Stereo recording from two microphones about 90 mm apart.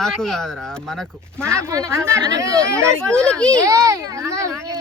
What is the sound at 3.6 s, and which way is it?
Speech, 35° right (ahead or behind).